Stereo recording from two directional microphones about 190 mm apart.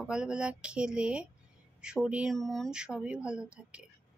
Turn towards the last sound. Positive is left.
turn(degrees=-5)  # may be behind; listen again after turning